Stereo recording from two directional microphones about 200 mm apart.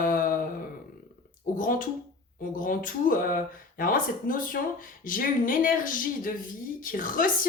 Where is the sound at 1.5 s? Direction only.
40° left (ahead or behind).